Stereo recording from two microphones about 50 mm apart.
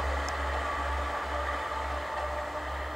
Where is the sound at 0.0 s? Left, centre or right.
Centre.